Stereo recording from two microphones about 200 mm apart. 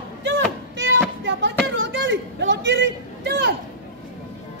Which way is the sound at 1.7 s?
65° right (ahead or behind).